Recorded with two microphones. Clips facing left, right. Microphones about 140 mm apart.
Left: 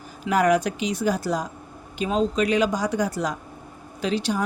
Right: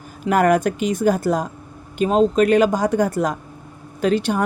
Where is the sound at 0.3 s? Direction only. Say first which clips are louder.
Right 4 dB; 50° right (ahead or behind).